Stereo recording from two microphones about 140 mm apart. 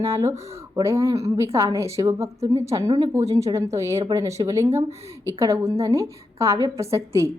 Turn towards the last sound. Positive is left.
turn(degrees=-20)  # may be behind; listen again after turning